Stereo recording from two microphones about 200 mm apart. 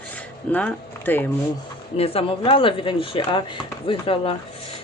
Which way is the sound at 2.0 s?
30° left (ahead or behind).